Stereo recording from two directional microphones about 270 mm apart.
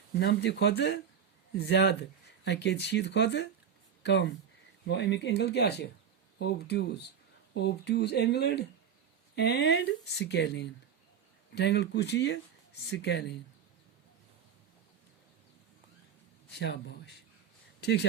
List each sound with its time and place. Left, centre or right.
0.2 s speech: left
16.5 s speech: left
17.7 s a sound: left